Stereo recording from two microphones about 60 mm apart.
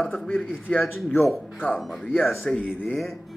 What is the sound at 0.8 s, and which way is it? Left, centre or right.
A man's voice, centre.